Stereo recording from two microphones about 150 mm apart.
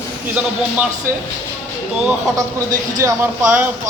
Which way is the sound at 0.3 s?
10° right (ahead or behind).